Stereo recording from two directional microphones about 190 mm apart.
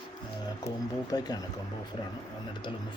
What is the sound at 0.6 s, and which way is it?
Speech, 20° left (ahead or behind).